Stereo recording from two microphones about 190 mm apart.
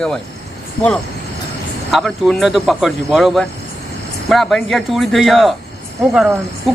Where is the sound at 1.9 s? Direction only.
Centre (ahead or behind).